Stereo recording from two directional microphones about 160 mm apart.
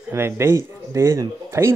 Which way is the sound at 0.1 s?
15° right (ahead or behind).